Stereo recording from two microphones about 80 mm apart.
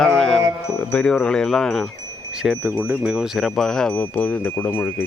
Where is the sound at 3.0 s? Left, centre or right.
Centre.